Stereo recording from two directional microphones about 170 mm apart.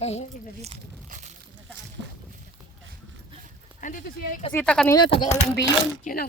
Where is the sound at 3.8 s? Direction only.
50° left (ahead or behind).